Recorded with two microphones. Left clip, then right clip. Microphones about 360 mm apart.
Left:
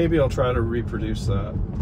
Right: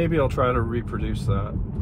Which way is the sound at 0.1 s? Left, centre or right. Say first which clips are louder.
Left 1 dB; right.